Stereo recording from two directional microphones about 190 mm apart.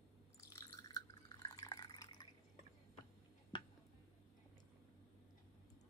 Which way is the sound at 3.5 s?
25° left (ahead or behind).